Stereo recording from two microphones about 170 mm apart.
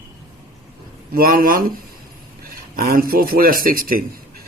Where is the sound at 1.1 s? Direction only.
60° right (ahead or behind).